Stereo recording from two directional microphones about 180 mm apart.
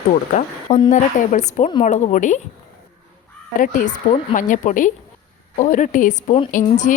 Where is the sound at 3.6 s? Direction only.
50° left (ahead or behind).